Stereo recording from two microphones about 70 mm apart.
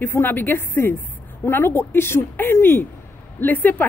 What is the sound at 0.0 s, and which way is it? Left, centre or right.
Speech, left.